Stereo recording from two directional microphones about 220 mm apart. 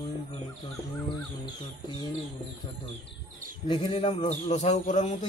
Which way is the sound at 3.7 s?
25° left (ahead or behind).